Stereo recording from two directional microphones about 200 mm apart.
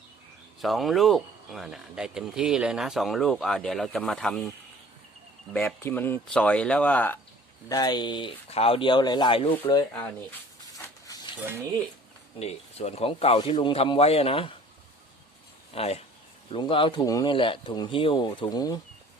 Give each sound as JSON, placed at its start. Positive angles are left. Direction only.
{"t": 0.6, "sound": "speech", "side_deg": 0}
{"t": 5.5, "sound": "speech", "side_deg": 10}
{"t": 7.7, "sound": "speech", "side_deg": 20}
{"t": 11.0, "sound": "a sound", "side_deg": 20}
{"t": 12.4, "sound": "speech", "side_deg": 30}
{"t": 15.7, "sound": "speech", "side_deg": 30}